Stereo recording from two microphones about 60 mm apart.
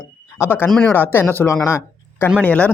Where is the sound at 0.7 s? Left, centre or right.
Centre.